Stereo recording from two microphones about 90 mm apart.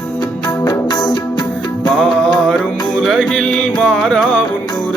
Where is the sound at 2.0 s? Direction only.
10° left (ahead or behind).